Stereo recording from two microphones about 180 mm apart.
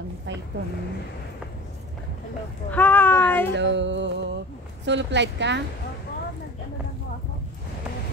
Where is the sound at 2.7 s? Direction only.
10° left (ahead or behind).